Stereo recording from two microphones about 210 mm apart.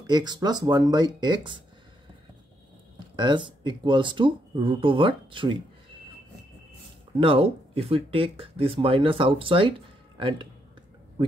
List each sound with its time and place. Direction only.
0.0 s speech: 20° right (ahead or behind)
3.2 s speech: 20° right (ahead or behind)
7.2 s speech: 25° right (ahead or behind)